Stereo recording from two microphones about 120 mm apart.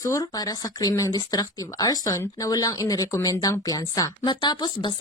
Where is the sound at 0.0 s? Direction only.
30° left (ahead or behind).